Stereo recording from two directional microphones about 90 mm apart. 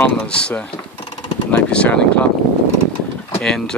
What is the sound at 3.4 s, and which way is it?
Speech, 10° left (ahead or behind).